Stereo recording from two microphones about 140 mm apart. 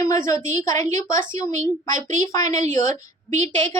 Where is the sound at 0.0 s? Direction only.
20° left (ahead or behind).